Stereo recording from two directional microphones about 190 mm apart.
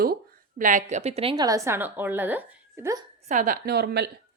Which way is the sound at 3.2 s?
40° right (ahead or behind).